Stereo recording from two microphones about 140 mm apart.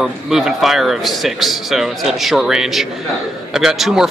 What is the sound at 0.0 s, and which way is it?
A man's voice, 5° right (ahead or behind).